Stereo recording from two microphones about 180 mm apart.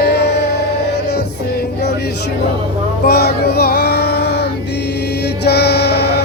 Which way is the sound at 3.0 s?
60° left (ahead or behind).